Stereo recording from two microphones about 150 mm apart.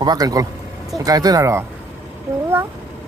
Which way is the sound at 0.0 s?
25° right (ahead or behind).